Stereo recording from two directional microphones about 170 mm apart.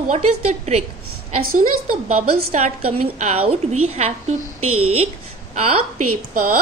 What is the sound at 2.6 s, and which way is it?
A woman's voice, 40° right (ahead or behind).